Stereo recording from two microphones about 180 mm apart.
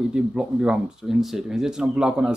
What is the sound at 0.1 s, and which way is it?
Speech, 5° right (ahead or behind).